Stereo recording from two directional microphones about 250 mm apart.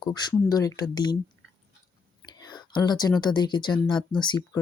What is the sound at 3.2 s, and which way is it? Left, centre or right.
Speech, centre.